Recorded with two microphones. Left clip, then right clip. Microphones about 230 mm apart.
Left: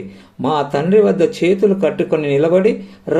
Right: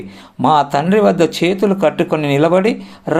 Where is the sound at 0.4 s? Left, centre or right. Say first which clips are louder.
Right 4 dB; right.